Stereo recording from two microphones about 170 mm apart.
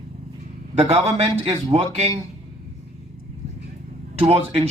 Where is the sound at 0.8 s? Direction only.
35° right (ahead or behind).